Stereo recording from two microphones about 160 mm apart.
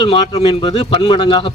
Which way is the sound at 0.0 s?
35° left (ahead or behind).